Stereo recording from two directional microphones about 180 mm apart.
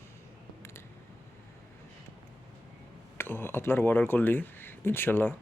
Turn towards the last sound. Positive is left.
turn(degrees=10)  # may be behind; listen again after turning